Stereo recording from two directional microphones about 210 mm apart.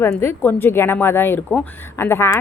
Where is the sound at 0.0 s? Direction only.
10° left (ahead or behind).